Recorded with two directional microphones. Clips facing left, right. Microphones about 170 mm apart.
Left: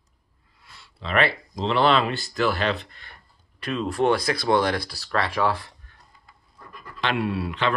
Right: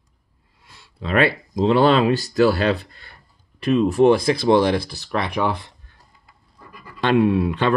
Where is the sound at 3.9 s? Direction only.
20° right (ahead or behind).